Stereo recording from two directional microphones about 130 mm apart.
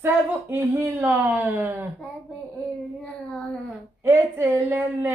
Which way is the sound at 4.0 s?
15° right (ahead or behind).